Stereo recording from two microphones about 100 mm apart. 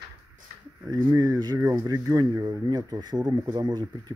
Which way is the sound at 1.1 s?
45° right (ahead or behind).